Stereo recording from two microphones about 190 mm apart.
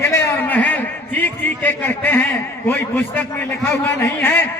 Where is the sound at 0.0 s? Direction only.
10° left (ahead or behind).